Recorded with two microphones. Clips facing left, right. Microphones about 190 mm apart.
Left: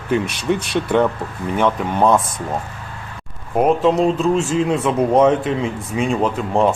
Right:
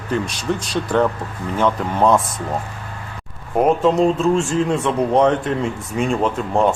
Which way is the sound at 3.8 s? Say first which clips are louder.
Even; centre (ahead or behind).